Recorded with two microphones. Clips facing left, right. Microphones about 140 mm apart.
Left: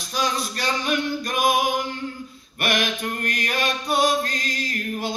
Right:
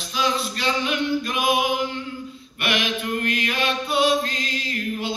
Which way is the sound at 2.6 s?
45° left (ahead or behind).